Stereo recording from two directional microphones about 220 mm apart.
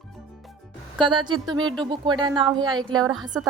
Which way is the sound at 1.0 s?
20° right (ahead or behind).